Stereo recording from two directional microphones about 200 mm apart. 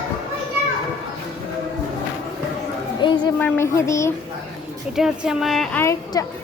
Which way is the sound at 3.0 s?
20° left (ahead or behind).